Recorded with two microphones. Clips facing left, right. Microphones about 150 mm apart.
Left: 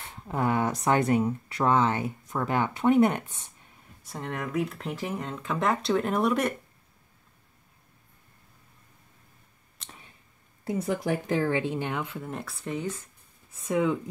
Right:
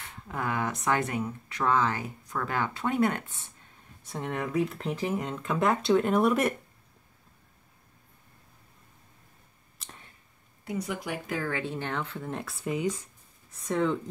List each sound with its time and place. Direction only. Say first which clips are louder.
0.3 s speech: left 5 dB; 25° left (ahead or behind)
4.0 s speech: right 1 dB; centre (ahead or behind)
10.6 s speech: left 5 dB; 35° left (ahead or behind)
11.4 s speech: left 5 dB; 20° left (ahead or behind); by 12.9 s 10° right (ahead or behind)
13.7 s speech: left 2 dB; 10° left (ahead or behind)